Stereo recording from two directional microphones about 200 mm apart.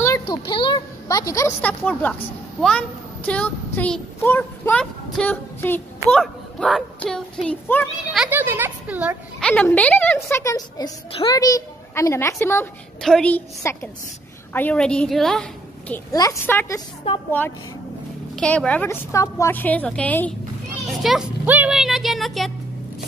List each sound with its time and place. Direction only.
0.0 s a sound: 20° left (ahead or behind)
2.6 s speech: 5° left (ahead or behind)
8.1 s speech: 5° right (ahead or behind)
9.4 s speech: 5° left (ahead or behind)
15.9 s speech: 15° left (ahead or behind)
18.3 s speech: 5° left (ahead or behind)